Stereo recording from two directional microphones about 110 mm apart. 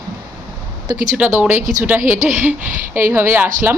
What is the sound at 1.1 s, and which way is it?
Speech, 15° right (ahead or behind).